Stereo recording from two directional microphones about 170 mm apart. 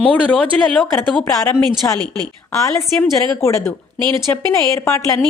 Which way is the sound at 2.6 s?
15° left (ahead or behind).